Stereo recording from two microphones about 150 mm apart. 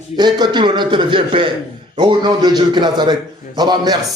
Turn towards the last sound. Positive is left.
turn(degrees=-25)  # may be behind; listen again after turning